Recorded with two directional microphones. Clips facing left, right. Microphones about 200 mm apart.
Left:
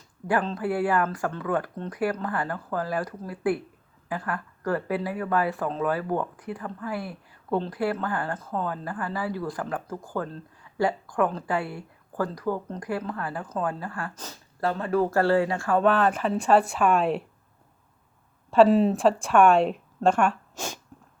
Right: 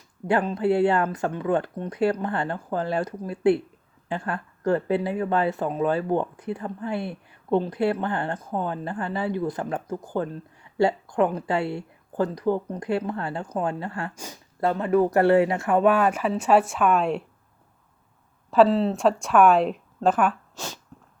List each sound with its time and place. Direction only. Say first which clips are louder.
0.5 s speech: right 4 dB; 25° right (ahead or behind); by 17.2 s centre (ahead or behind)
18.7 s speech: left 2 dB; 15° left (ahead or behind)
18.9 s a woman's voice: right 1 dB; centre (ahead or behind)